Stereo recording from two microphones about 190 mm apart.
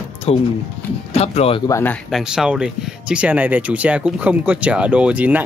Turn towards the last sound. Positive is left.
turn(degrees=-10)  # may be behind; listen again after turning